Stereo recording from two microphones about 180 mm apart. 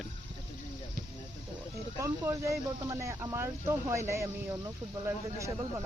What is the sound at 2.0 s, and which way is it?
Speech, 15° right (ahead or behind).